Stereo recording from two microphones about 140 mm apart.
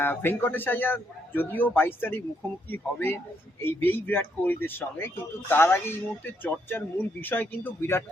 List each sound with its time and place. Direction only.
0.0 s speech: 15° left (ahead or behind)